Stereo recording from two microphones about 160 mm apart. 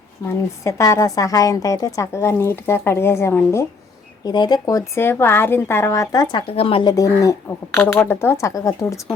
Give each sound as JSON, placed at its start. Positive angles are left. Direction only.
{"t": 0.6, "sound": "a woman's voice", "side_deg": 20}
{"t": 4.3, "sound": "speech", "side_deg": 25}
{"t": 6.9, "sound": "a woman's voice", "side_deg": 20}